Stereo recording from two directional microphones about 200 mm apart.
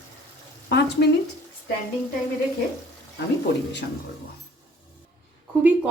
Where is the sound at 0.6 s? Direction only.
55° left (ahead or behind).